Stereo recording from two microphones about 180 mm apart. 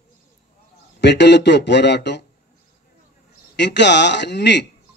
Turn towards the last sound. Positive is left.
turn(degrees=70)  # may be behind; listen again after turning